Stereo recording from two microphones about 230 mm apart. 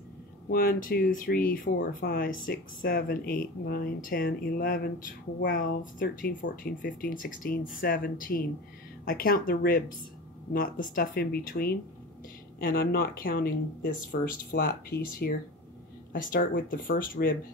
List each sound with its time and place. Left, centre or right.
0.5 s speech: left